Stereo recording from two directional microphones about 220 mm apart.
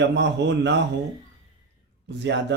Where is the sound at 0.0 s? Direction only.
55° right (ahead or behind).